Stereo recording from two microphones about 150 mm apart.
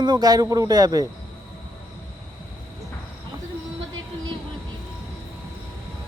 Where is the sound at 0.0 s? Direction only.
25° right (ahead or behind).